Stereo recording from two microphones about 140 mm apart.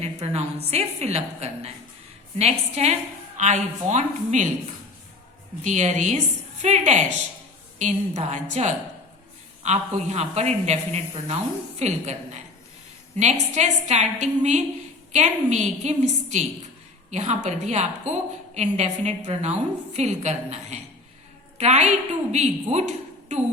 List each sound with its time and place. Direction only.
0.0 s a woman's voice: 45° right (ahead or behind)
5.6 s a woman's voice: 55° right (ahead or behind)
9.6 s a woman's voice: 50° right (ahead or behind)